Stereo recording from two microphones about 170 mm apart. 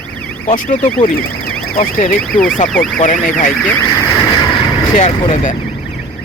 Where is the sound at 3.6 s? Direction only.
10° left (ahead or behind).